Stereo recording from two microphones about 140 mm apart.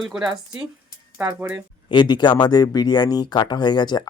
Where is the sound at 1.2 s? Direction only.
15° right (ahead or behind).